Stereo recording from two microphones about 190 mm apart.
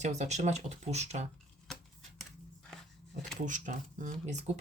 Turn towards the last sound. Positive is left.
turn(degrees=-40)  # may be behind; listen again after turning